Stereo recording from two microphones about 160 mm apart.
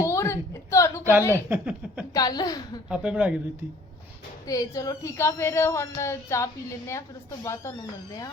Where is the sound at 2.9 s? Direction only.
5° right (ahead or behind).